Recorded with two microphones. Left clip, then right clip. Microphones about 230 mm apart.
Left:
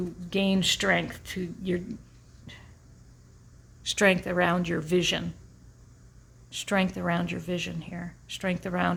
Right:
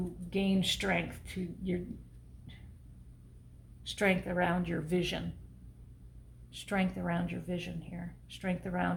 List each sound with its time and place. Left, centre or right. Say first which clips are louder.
0.3 s speech: left 7 dB; left
3.8 s speech: left 8 dB; left
6.5 s speech: left 7 dB; left